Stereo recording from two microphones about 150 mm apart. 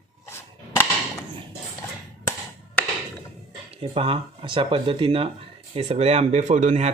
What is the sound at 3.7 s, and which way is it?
Speech, 40° right (ahead or behind).